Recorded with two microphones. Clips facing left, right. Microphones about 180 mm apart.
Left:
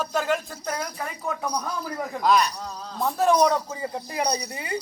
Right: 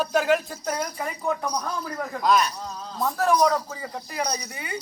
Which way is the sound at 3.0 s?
20° left (ahead or behind).